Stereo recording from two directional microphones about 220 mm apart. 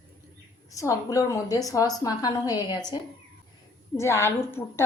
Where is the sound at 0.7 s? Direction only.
15° left (ahead or behind).